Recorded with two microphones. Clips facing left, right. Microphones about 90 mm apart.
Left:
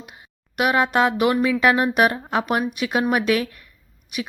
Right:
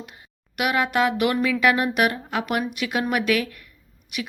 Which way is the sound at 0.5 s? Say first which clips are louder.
Left 3 dB; 30° left (ahead or behind).